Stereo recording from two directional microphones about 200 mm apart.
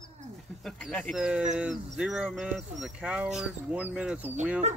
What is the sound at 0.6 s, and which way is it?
Speech, 5° left (ahead or behind).